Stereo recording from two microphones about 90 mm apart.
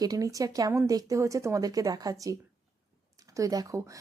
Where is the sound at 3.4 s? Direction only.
40° right (ahead or behind).